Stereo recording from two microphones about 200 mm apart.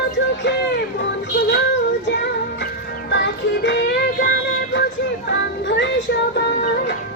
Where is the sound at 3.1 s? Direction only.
65° left (ahead or behind).